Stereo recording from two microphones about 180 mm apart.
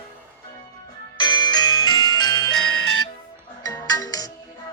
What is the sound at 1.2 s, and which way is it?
Music, 25° left (ahead or behind).